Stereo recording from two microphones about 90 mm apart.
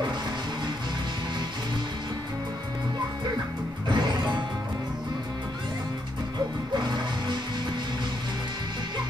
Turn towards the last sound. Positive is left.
turn(degrees=-55)  # may be behind; listen again after turning